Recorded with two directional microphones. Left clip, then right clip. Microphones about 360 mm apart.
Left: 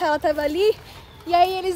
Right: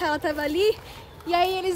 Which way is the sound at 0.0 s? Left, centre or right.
Centre.